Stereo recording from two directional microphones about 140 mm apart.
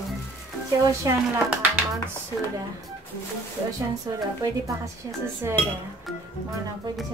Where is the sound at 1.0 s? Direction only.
20° right (ahead or behind).